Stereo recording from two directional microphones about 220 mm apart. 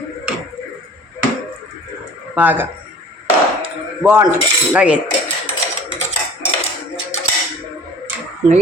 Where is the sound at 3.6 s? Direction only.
5° right (ahead or behind).